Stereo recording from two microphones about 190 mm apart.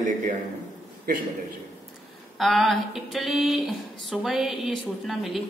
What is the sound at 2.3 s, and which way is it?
A woman's voice, centre (ahead or behind).